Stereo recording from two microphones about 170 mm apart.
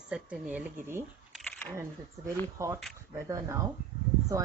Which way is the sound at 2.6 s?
20° right (ahead or behind).